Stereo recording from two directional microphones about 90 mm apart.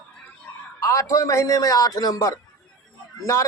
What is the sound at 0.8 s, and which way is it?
A man's voice, 35° left (ahead or behind).